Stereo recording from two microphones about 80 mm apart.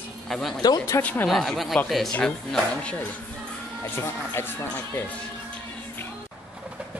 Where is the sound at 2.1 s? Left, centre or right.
Centre.